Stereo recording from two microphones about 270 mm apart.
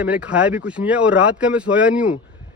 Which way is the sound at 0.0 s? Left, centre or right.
Centre.